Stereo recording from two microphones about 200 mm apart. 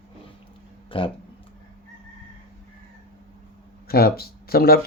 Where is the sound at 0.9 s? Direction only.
25° left (ahead or behind).